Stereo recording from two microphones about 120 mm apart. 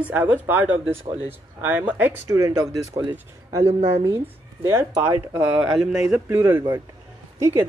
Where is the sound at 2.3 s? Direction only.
30° right (ahead or behind).